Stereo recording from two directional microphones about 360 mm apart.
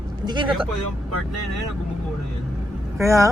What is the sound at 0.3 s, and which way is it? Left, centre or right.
Speech, centre.